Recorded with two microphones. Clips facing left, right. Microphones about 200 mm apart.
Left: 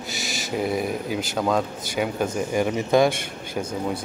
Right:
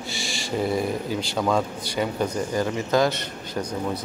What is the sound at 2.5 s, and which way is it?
Speech, 20° left (ahead or behind).